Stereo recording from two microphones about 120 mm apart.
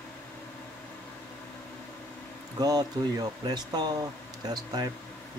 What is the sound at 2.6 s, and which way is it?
Speech, 30° right (ahead or behind).